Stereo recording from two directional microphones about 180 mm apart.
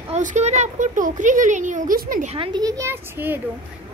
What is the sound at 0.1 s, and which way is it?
A woman's voice, 40° right (ahead or behind).